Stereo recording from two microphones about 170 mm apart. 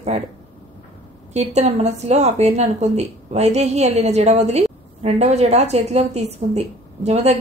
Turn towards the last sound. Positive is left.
turn(degrees=-40)  # may be behind; listen again after turning